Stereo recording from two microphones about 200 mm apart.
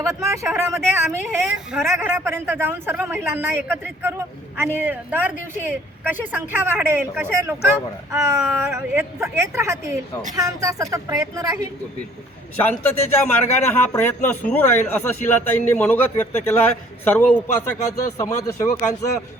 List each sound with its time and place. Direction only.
0.1 s speech: 15° right (ahead or behind)
12.6 s a man's voice: 10° left (ahead or behind)